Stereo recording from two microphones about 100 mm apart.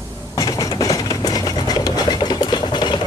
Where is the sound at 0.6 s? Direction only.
35° left (ahead or behind).